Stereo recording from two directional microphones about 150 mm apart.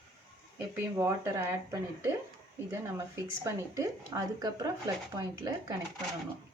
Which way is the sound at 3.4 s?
20° right (ahead or behind).